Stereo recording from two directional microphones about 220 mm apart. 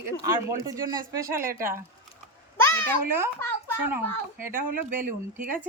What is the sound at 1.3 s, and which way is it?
Speech, 40° right (ahead or behind).